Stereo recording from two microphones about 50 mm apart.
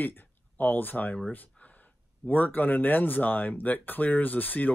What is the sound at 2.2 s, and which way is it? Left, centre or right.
Speech, left.